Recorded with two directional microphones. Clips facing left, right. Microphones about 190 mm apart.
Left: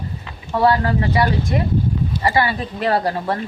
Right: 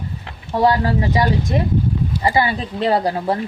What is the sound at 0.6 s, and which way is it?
Speech, 20° right (ahead or behind).